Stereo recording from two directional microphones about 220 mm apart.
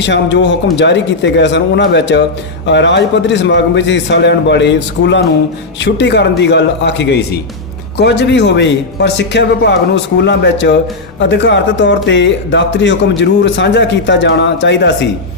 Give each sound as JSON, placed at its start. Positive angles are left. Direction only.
{"t": 0.0, "sound": "a man's voice", "side_deg": 55}